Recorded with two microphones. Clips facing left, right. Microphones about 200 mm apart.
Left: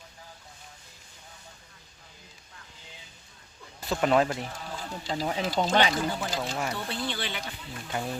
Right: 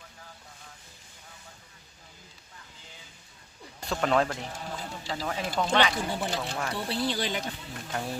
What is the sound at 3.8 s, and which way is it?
Speech, 5° left (ahead or behind).